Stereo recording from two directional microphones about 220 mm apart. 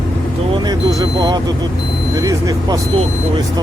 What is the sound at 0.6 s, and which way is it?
Speech, 20° right (ahead or behind).